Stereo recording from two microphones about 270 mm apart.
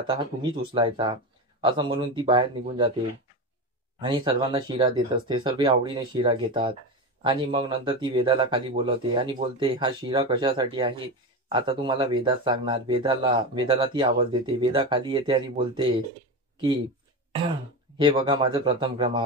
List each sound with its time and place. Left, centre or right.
0.0 s speech: centre
4.0 s speech: centre
17.9 s speech: centre